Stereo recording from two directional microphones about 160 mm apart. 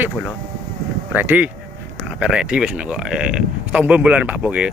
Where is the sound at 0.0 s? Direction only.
5° right (ahead or behind).